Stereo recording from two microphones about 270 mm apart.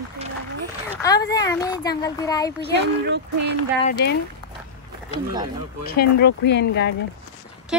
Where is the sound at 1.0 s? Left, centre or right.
Centre.